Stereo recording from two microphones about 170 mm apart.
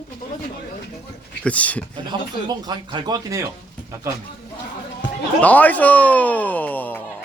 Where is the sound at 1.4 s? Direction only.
10° left (ahead or behind).